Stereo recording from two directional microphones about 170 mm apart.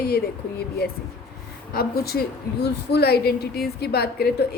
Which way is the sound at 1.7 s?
65° left (ahead or behind).